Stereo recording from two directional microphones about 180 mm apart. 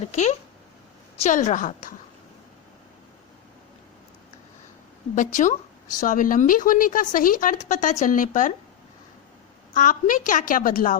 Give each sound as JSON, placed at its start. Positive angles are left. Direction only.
{"t": 0.0, "sound": "speech", "side_deg": 40}
{"t": 5.1, "sound": "speech", "side_deg": 45}
{"t": 9.7, "sound": "speech", "side_deg": 45}